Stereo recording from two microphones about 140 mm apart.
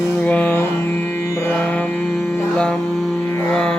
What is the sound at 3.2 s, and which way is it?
Music, 15° left (ahead or behind).